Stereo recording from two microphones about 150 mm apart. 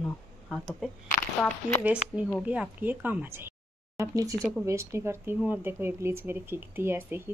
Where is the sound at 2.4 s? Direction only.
10° right (ahead or behind).